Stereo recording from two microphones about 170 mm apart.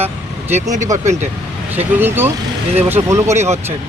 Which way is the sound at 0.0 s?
15° right (ahead or behind).